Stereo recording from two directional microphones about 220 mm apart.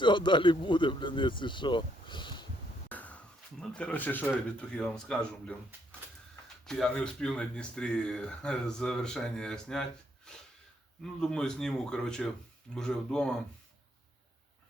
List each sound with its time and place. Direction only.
0.0 s speech: 20° left (ahead or behind)
2.9 s a sound: 5° left (ahead or behind)
3.6 s speech: 5° left (ahead or behind)
6.7 s speech: centre (ahead or behind)
11.0 s speech: 5° left (ahead or behind)